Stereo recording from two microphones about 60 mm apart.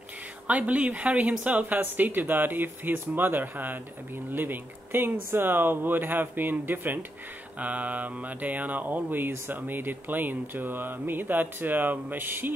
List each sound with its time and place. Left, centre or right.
0.5 s speech: right
4.3 s mantra: right